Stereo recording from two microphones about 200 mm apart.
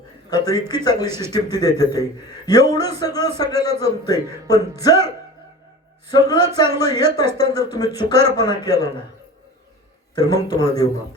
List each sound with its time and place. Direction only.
0.3 s a man's voice: 20° left (ahead or behind)
6.1 s a man's voice: 20° left (ahead or behind)
10.2 s a man's voice: 20° left (ahead or behind)